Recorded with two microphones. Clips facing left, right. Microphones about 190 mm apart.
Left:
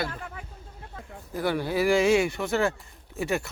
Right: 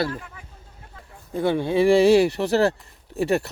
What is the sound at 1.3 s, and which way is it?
Speech, 25° right (ahead or behind).